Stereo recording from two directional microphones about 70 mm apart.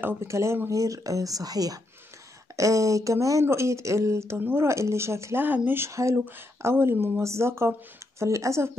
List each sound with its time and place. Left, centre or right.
0.2 s speech: right
2.5 s a woman's voice: right